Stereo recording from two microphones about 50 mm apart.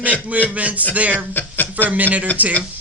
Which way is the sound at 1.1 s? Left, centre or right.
Left.